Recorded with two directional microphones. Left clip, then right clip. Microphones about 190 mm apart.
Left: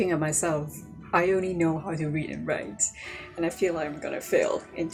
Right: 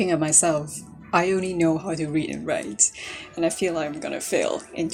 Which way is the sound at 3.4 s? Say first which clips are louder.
Right 3 dB; 40° right (ahead or behind).